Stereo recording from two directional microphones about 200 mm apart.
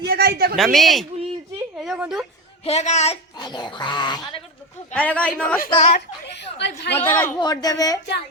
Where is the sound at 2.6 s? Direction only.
35° left (ahead or behind).